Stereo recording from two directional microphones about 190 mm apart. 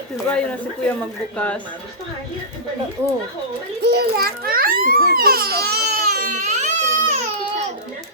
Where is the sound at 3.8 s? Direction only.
60° right (ahead or behind); by 6.9 s 40° right (ahead or behind).